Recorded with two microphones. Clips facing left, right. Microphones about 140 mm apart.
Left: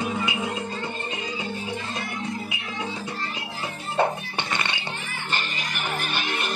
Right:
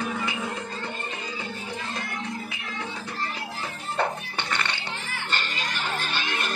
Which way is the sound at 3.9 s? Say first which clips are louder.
Left 4 dB; 15° left (ahead or behind).